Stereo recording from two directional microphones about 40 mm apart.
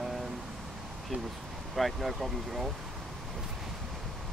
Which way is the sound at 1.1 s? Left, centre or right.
Right.